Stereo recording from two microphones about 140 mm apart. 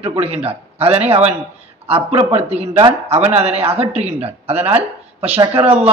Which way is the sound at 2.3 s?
50° right (ahead or behind).